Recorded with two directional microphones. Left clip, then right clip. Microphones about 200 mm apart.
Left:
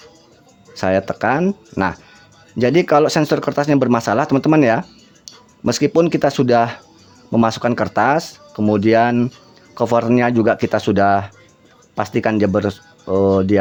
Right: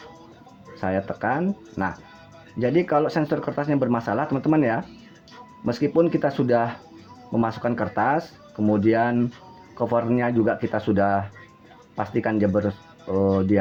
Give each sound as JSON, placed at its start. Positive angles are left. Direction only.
{"t": 0.8, "sound": "speech", "side_deg": 65}